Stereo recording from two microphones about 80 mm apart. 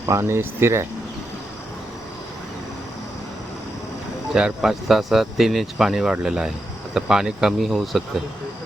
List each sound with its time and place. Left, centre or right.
0.0 s speech: right
4.4 s speech: centre